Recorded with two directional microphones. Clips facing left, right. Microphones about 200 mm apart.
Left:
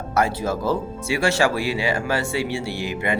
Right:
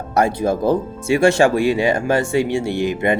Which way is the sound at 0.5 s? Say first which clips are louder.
Right 5 dB; 15° right (ahead or behind).